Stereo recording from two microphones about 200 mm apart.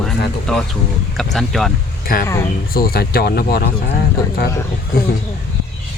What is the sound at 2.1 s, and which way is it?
Speech, 45° left (ahead or behind).